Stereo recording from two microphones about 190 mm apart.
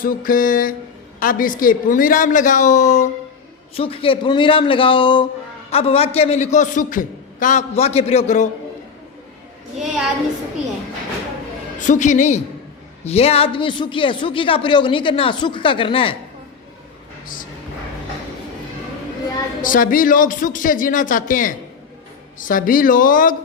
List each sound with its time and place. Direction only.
0.0 s a man's voice: 50° left (ahead or behind)
11.9 s a man's voice: 40° left (ahead or behind)
19.6 s a man's voice: 45° left (ahead or behind)